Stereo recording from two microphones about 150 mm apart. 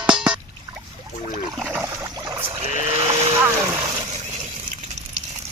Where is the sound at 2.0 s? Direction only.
30° right (ahead or behind).